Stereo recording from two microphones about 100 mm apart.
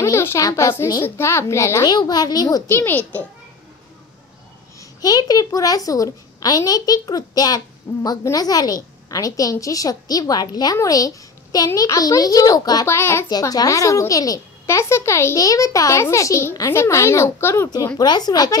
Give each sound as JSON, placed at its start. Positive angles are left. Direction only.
{"t": 0.0, "sound": "a woman's voice", "side_deg": 30}
{"t": 1.9, "sound": "a woman's voice", "side_deg": 45}
{"t": 2.7, "sound": "a child's voice", "side_deg": 20}
{"t": 4.7, "sound": "a woman's voice", "side_deg": 40}
{"t": 12.8, "sound": "a child's voice", "side_deg": 25}
{"t": 13.3, "sound": "a woman's voice", "side_deg": 40}
{"t": 17.9, "sound": "a woman's voice", "side_deg": 45}